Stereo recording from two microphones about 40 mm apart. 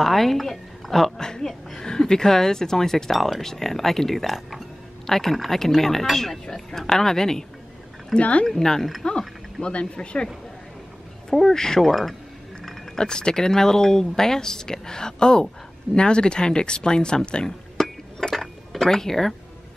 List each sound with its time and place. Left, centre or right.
0.0 s a woman's voice: centre
1.9 s speech: centre
8.2 s speech: left
8.5 s speech: centre
9.6 s speech: left
11.2 s speech: centre
11.9 s speech: centre
12.9 s speech: centre
17.8 s chink: centre
18.3 s dishes: centre